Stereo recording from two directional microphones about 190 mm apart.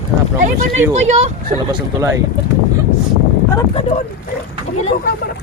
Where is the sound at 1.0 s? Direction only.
35° right (ahead or behind).